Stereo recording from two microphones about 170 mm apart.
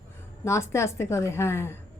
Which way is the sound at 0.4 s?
15° left (ahead or behind).